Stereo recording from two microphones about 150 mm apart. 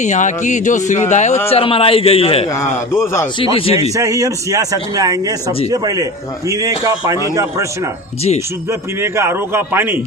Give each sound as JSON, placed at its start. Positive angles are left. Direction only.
{"t": 0.0, "sound": "speech", "side_deg": 55}
{"t": 1.5, "sound": "a man's voice", "side_deg": 40}
{"t": 2.5, "sound": "a man's voice", "side_deg": 20}
{"t": 3.3, "sound": "a man's voice", "side_deg": 35}
{"t": 3.9, "sound": "a man's voice", "side_deg": -20}
{"t": 9.0, "sound": "speech", "side_deg": -15}